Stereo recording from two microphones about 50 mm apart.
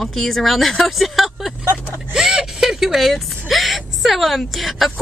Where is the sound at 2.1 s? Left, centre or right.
Centre.